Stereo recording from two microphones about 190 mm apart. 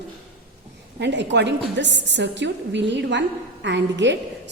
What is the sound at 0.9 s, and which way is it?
A woman's voice, 65° right (ahead or behind).